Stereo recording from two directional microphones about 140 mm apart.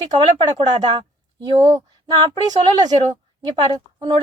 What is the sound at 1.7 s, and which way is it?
Speech, 30° right (ahead or behind).